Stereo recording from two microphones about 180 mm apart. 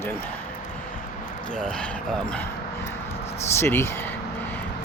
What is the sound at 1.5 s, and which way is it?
Speech, 5° left (ahead or behind).